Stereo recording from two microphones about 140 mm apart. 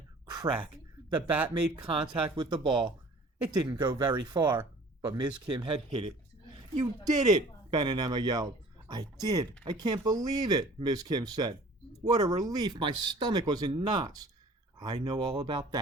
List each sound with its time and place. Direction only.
0.3 s a sound: 30° right (ahead or behind)
1.1 s speech: 10° right (ahead or behind)
1.9 s speech: 35° right (ahead or behind)
7.2 s speech: 30° right (ahead or behind)